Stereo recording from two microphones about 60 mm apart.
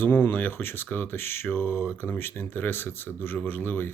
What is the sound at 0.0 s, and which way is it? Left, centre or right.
Speech, left.